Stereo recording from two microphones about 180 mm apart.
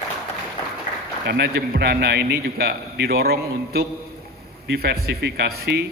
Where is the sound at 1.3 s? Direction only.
60° right (ahead or behind).